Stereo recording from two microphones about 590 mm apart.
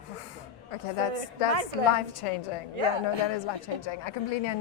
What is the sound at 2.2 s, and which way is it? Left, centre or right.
Speech, left.